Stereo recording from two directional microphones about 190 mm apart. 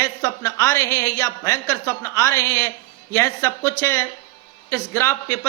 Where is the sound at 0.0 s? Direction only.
15° left (ahead or behind).